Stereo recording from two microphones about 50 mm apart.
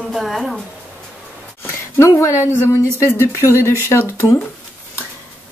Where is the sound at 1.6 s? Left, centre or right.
Left.